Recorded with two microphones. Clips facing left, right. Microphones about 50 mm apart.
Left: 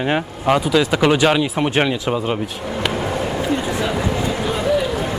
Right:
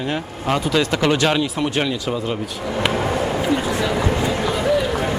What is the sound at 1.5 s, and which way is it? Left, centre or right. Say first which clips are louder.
Speech: left 3 dB; left.